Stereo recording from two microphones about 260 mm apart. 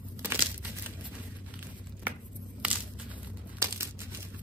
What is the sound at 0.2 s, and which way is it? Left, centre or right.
Crumpling, centre.